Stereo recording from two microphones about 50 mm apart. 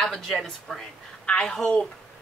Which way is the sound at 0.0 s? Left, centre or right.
Centre.